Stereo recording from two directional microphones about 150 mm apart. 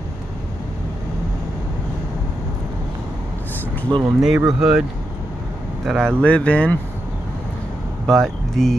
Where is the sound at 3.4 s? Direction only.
10° left (ahead or behind).